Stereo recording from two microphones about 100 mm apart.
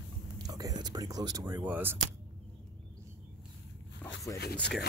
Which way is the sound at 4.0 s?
35° left (ahead or behind).